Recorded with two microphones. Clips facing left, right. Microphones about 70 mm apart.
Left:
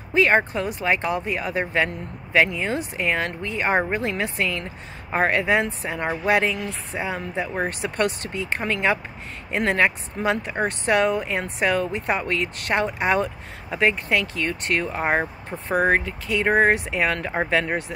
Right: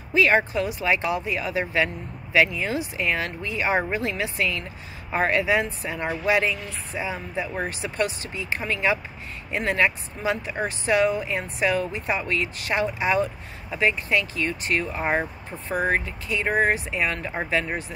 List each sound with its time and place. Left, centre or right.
0.1 s speech: left